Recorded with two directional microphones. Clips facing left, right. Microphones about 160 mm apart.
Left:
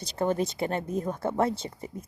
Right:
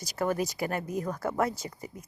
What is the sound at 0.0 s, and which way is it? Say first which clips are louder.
Speech: left 2 dB; 25° left (ahead or behind).